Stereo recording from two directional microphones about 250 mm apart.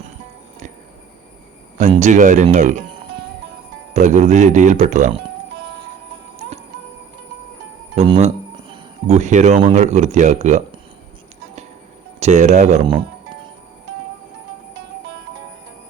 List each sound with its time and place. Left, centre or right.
1.8 s speech: right
3.9 s speech: right
7.9 s speech: right
12.2 s speech: right